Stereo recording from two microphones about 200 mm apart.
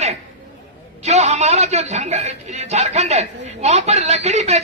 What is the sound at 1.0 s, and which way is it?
A man's voice, 35° right (ahead or behind).